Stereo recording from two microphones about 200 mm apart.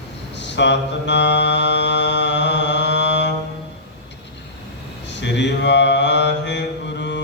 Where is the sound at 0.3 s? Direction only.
60° left (ahead or behind).